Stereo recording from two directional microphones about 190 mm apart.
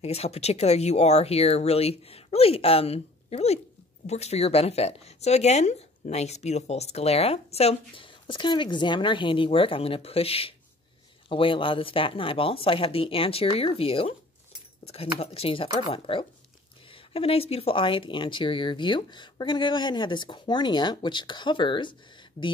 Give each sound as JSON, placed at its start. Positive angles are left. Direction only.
{"t": 0.0, "sound": "speech", "side_deg": 35}